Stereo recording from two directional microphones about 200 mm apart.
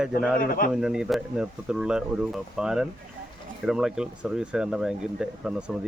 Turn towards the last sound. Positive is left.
turn(degrees=-5)  # may be behind; listen again after turning